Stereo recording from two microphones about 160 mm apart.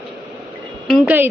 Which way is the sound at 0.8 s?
10° right (ahead or behind).